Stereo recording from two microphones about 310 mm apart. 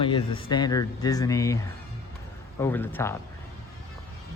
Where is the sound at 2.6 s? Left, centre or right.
Centre.